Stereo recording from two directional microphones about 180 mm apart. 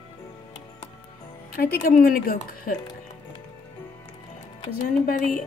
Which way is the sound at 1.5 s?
50° left (ahead or behind).